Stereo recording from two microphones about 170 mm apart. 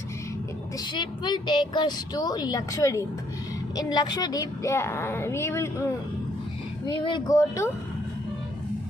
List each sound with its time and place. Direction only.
0.8 s a woman's voice: 25° left (ahead or behind)
6.8 s a woman's voice: 30° left (ahead or behind)
7.3 s a woman's voice: 15° left (ahead or behind)